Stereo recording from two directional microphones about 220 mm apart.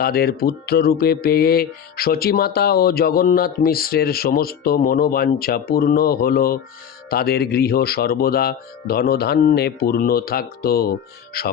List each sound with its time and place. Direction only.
0.0 s speech: 45° left (ahead or behind)